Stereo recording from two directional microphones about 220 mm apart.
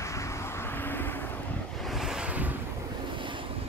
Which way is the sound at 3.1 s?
20° right (ahead or behind).